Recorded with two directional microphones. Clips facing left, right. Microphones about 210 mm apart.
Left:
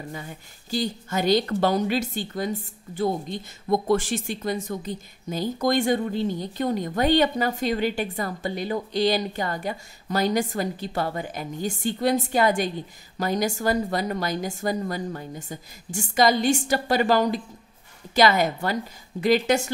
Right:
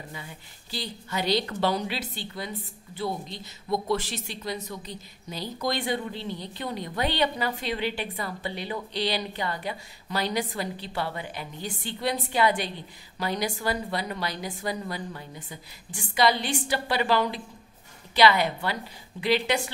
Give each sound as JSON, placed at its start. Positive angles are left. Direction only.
{"t": 0.1, "sound": "a woman's voice", "side_deg": 45}